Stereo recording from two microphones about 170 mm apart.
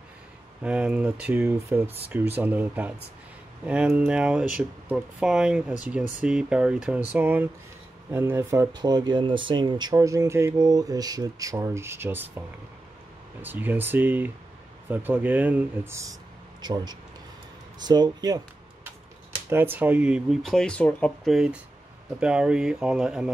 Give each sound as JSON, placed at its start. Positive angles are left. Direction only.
{"t": 0.6, "sound": "speech", "side_deg": -5}
{"t": 13.4, "sound": "speech", "side_deg": -10}
{"t": 19.5, "sound": "speech", "side_deg": -10}